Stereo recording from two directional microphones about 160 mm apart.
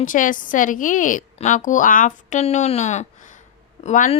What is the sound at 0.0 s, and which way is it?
A woman's voice, 55° left (ahead or behind).